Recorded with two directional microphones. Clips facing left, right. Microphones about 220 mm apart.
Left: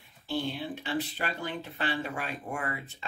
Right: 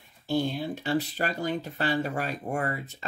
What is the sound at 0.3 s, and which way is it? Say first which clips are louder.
Speech: right 5 dB; 45° right (ahead or behind).